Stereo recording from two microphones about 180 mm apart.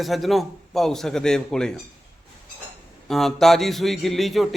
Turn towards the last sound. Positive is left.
turn(degrees=0)  # may be behind; listen again after turning